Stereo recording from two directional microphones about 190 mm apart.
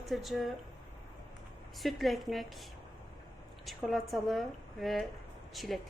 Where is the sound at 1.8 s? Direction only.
Centre (ahead or behind).